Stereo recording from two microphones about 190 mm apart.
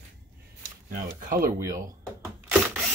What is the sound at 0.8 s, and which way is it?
Speech, 45° right (ahead or behind).